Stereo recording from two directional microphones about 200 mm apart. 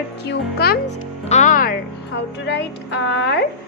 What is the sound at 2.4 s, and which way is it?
Speech, 60° left (ahead or behind).